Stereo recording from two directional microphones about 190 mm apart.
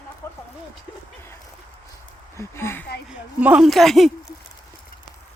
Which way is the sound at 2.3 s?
15° left (ahead or behind).